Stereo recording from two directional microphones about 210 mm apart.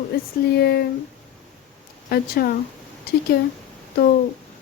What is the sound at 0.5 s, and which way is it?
Speech, 50° left (ahead or behind).